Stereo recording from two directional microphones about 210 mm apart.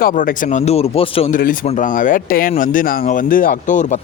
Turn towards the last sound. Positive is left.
turn(degrees=40)  # may be behind; listen again after turning